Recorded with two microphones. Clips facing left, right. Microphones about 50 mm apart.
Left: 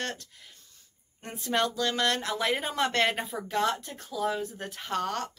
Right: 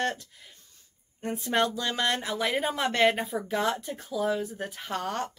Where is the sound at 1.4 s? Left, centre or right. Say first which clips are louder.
Even; centre.